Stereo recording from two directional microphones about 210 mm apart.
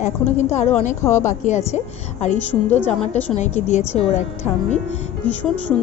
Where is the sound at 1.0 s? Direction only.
10° left (ahead or behind).